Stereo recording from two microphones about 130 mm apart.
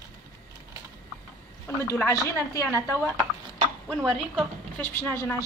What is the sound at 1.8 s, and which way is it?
A woman's voice, 20° left (ahead or behind).